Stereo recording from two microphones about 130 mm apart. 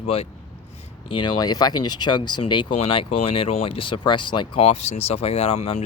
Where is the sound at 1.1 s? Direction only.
35° left (ahead or behind).